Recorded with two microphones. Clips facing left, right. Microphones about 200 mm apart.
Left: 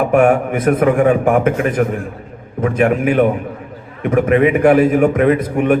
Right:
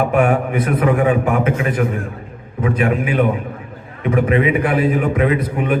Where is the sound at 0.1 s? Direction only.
45° left (ahead or behind).